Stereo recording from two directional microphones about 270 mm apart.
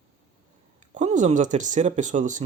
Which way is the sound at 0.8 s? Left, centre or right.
Right.